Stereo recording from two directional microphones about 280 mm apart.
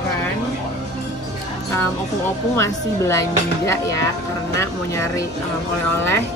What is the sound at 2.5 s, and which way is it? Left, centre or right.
Speech, centre.